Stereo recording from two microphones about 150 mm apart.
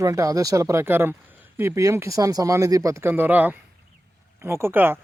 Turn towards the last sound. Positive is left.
turn(degrees=-15)  # may be behind; listen again after turning